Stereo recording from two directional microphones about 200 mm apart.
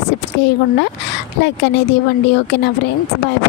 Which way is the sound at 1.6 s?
60° left (ahead or behind).